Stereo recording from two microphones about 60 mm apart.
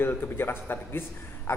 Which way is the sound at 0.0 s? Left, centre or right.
Left.